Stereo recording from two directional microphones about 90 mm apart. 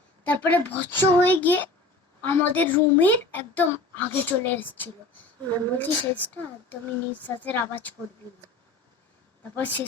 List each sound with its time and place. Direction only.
0.3 s speech: 20° left (ahead or behind)
9.4 s speech: 20° left (ahead or behind)